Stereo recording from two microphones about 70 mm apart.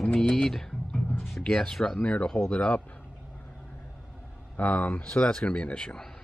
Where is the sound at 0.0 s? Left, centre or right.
Centre.